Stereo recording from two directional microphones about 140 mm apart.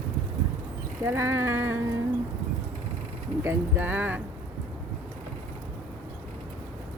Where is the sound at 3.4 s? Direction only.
15° right (ahead or behind).